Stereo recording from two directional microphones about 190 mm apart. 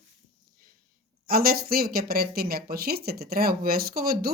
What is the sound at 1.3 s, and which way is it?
Speech, 50° right (ahead or behind).